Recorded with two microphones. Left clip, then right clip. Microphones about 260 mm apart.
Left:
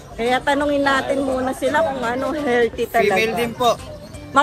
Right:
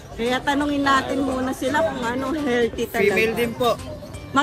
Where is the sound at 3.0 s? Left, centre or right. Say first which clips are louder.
Left 2 dB; centre.